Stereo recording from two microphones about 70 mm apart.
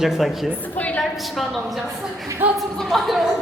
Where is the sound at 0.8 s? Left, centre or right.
Centre.